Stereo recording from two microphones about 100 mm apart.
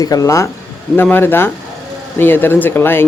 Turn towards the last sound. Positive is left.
turn(degrees=20)  # may be behind; listen again after turning